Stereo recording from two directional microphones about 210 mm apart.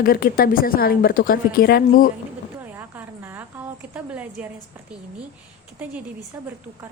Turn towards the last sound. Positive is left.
turn(degrees=-10)  # may be behind; listen again after turning